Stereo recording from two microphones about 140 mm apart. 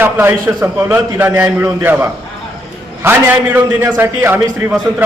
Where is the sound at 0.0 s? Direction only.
15° right (ahead or behind).